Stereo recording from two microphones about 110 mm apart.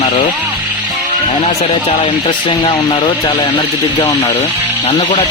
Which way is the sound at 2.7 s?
55° left (ahead or behind).